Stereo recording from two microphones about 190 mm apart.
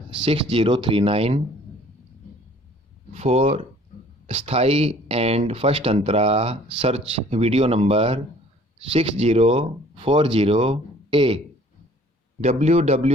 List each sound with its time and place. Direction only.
0.2 s speech: 30° right (ahead or behind)
3.1 s speech: 35° right (ahead or behind)
12.4 s speech: 35° right (ahead or behind)